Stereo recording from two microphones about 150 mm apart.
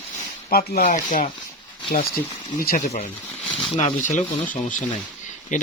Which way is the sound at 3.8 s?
50° left (ahead or behind).